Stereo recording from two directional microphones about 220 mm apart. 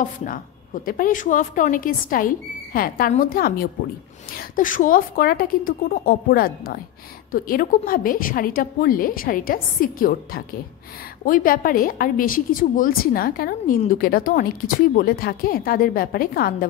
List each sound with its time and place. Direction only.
0.0 s a woman's voice: 35° left (ahead or behind)